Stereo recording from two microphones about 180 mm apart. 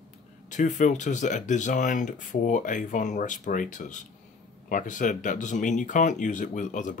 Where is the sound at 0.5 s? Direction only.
40° left (ahead or behind).